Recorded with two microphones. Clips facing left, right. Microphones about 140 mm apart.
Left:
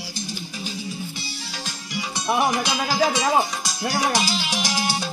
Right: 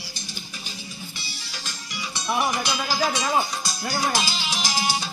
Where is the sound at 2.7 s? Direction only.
90° left.